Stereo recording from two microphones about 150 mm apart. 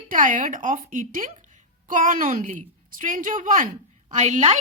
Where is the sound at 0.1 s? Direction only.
60° right (ahead or behind).